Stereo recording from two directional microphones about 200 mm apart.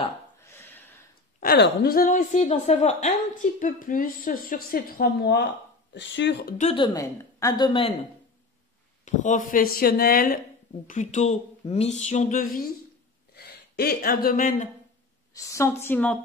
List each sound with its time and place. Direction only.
0.6 s a sound: 10° left (ahead or behind)
1.4 s a woman's voice: 50° left (ahead or behind)
6.6 s a woman's voice: 25° left (ahead or behind)
9.0 s a woman's voice: 40° left (ahead or behind)
13.3 s speech: 50° left (ahead or behind)
15.3 s a woman's voice: 15° left (ahead or behind)